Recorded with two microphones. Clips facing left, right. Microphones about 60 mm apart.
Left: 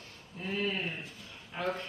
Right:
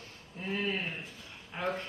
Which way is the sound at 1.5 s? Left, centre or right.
Centre.